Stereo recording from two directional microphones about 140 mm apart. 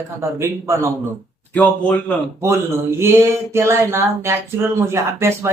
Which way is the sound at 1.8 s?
10° left (ahead or behind).